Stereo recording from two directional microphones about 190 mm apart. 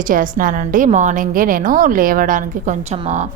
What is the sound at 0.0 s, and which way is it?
A woman's voice, 45° right (ahead or behind).